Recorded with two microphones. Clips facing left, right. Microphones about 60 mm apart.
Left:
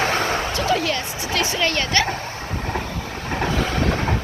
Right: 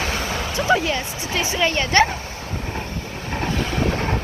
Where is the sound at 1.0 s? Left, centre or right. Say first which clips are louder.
Left 1 dB; left.